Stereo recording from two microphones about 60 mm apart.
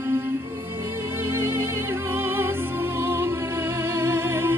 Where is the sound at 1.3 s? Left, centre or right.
Right.